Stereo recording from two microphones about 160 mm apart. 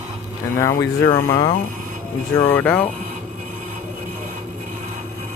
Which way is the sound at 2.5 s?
10° left (ahead or behind).